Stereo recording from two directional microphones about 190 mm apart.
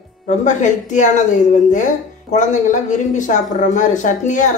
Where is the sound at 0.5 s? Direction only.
40° left (ahead or behind).